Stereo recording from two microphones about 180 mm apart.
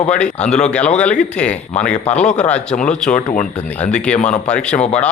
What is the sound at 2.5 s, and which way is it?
Speech, 5° left (ahead or behind).